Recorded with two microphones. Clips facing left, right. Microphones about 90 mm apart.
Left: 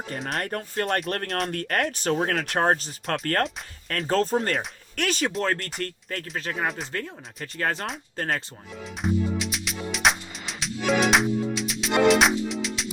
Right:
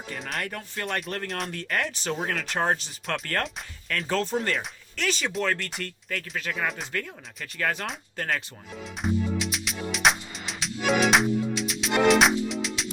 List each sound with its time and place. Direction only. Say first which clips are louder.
0.3 s speech: left 5 dB; 45° left (ahead or behind)
5.4 s speech: left 1 dB; 40° left (ahead or behind)
9.0 s music: left 1 dB; centre (ahead or behind)